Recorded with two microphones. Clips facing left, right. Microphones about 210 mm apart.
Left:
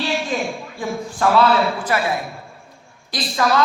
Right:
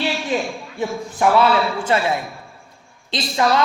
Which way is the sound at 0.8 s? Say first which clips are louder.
Right 2 dB; 20° right (ahead or behind).